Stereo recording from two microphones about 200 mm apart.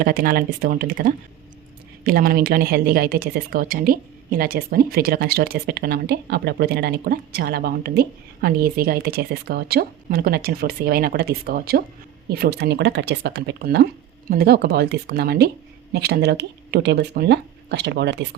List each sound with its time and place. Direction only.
0.0 s speech: 45° right (ahead or behind)